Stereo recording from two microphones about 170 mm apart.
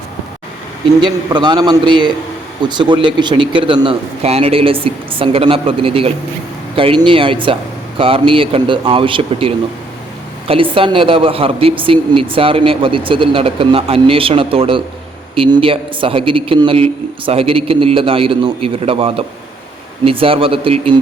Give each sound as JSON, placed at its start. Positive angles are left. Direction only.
{"t": 1.0, "sound": "a man's voice", "side_deg": -25}
{"t": 10.5, "sound": "a woman's voice", "side_deg": -30}